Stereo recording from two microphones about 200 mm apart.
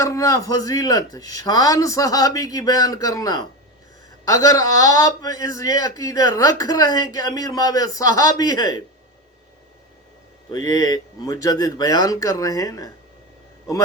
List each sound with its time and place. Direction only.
0.0 s a man's voice: 15° left (ahead or behind)
10.7 s a man's voice: 20° left (ahead or behind)